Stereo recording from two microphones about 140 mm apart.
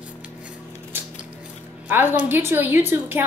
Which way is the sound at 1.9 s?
15° right (ahead or behind).